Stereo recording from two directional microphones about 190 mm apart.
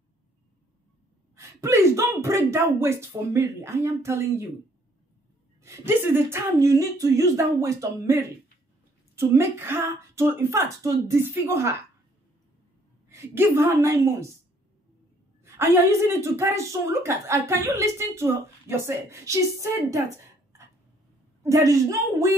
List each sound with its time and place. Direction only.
1.3 s speech: 15° right (ahead or behind)
5.6 s speech: 15° right (ahead or behind)
13.1 s speech: 10° right (ahead or behind)
15.4 s speech: 15° right (ahead or behind)
21.4 s speech: 15° right (ahead or behind)